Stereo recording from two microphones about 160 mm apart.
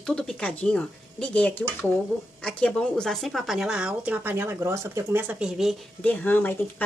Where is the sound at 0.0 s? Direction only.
5° left (ahead or behind).